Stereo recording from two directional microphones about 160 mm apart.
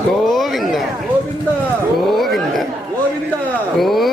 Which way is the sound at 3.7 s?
Centre (ahead or behind).